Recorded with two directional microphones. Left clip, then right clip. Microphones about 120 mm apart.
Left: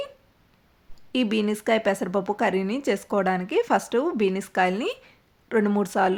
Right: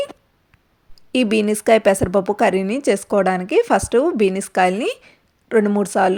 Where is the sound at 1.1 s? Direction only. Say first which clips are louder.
Right 7 dB; 45° right (ahead or behind).